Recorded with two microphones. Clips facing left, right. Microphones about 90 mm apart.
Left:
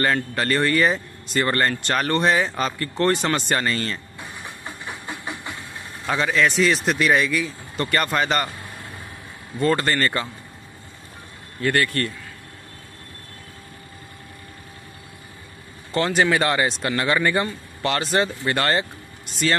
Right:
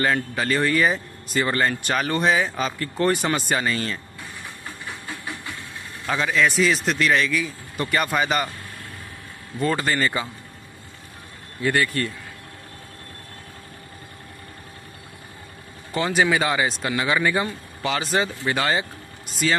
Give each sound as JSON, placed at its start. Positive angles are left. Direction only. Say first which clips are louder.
{"t": 0.0, "sound": "speech", "louder": "left 1 dB", "side_deg": 0}
{"t": 4.6, "sound": "steam", "louder": "left 2 dB", "side_deg": 20}
{"t": 6.0, "sound": "speech", "louder": "left 1 dB", "side_deg": 0}
{"t": 9.6, "sound": "speech", "louder": "left 2 dB", "side_deg": 0}
{"t": 11.6, "sound": "speech", "louder": "left 1 dB", "side_deg": -5}
{"t": 15.9, "sound": "speech", "louder": "left 1 dB", "side_deg": -5}